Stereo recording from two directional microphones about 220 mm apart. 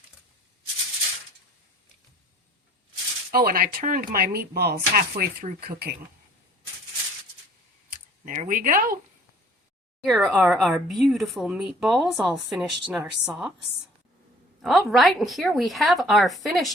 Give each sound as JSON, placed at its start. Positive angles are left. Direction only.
{"t": 3.3, "sound": "speech", "side_deg": -40}
{"t": 7.9, "sound": "speech", "side_deg": -35}
{"t": 10.0, "sound": "speech", "side_deg": 0}
{"t": 14.6, "sound": "speech", "side_deg": 0}